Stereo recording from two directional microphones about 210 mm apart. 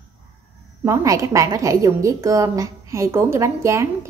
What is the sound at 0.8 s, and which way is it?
A woman's voice, 15° right (ahead or behind).